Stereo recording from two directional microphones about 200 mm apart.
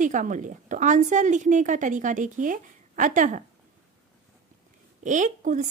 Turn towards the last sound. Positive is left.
turn(degrees=-40)  # may be behind; listen again after turning